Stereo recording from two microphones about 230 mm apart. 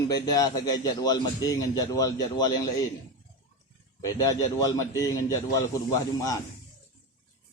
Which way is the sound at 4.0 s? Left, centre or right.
Centre.